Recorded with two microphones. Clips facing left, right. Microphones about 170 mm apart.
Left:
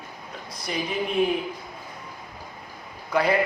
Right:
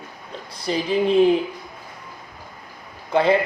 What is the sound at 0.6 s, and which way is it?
Speech, 30° right (ahead or behind).